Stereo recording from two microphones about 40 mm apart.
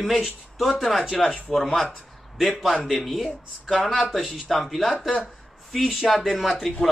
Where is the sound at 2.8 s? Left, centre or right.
Centre.